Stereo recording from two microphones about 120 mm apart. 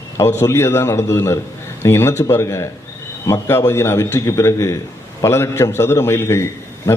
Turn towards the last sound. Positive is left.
turn(degrees=25)  # may be behind; listen again after turning